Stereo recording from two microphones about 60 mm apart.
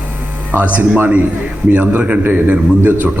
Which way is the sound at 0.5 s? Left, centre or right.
Right.